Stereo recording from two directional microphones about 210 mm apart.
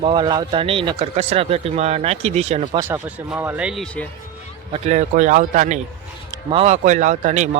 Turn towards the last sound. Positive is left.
turn(degrees=-35)  # may be behind; listen again after turning